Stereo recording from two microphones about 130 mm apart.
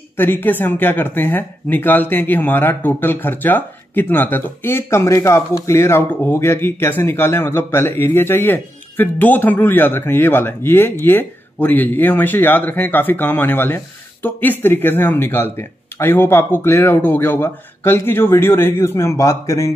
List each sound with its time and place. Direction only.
0.2 s speech: 15° left (ahead or behind)